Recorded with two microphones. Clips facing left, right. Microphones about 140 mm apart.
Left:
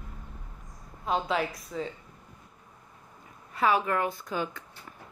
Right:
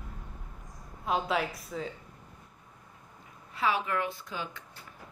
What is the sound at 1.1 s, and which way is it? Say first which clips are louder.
Speech: left 1 dB; centre (ahead or behind).